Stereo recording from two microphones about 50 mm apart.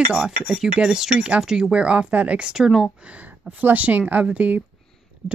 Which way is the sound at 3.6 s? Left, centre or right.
Right.